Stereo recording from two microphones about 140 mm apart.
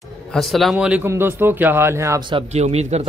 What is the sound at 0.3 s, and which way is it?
A man's voice, centre (ahead or behind).